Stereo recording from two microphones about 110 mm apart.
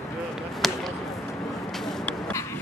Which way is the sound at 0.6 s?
Centre (ahead or behind).